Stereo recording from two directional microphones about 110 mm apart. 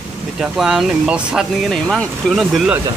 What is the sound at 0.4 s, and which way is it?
Speech, 5° right (ahead or behind).